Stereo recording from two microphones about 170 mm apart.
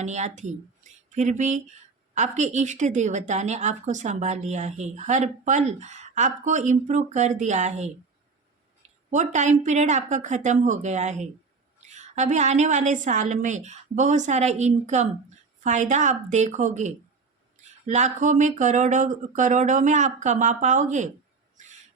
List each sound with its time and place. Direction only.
0.0 s a woman's voice: 40° right (ahead or behind)
9.0 s a woman's voice: 45° right (ahead or behind)
21.6 s crow: 45° right (ahead or behind)